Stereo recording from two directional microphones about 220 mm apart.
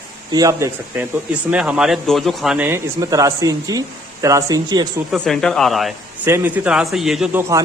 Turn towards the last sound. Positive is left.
turn(degrees=-15)  # may be behind; listen again after turning